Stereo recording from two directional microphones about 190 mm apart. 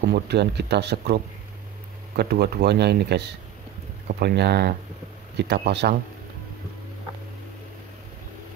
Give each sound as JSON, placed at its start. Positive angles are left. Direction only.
{"t": 0.0, "sound": "speech", "side_deg": -60}